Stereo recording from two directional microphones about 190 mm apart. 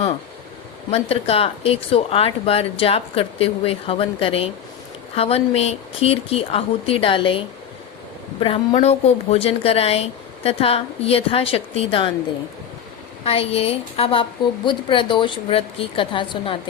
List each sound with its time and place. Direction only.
0.9 s speech: 30° left (ahead or behind)
13.2 s a woman's voice: 30° left (ahead or behind)